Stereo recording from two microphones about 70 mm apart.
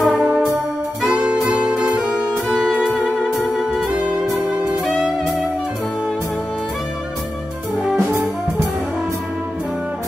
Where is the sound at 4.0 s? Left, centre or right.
Centre.